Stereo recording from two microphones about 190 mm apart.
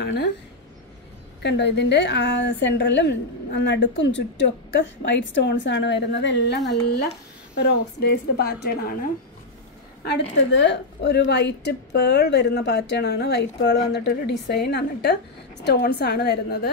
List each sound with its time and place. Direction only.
0.0 s speech: 60° left (ahead or behind)
1.4 s a woman's voice: 65° left (ahead or behind)
10.0 s a woman's voice: 65° left (ahead or behind)